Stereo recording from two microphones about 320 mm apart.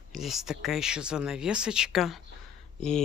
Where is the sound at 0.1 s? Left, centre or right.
Centre.